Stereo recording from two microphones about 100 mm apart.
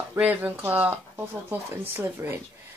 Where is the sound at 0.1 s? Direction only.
20° right (ahead or behind).